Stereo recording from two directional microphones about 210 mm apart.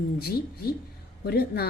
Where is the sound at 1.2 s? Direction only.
50° left (ahead or behind).